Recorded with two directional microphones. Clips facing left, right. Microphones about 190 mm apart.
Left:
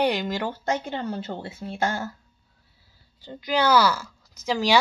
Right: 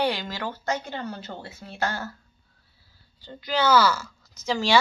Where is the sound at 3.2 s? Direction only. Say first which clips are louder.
Left 1 dB; 10° left (ahead or behind).